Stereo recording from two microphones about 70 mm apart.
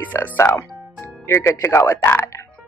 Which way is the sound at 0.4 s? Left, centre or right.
Left.